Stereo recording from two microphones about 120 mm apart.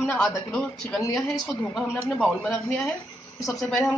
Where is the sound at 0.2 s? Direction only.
5° left (ahead or behind).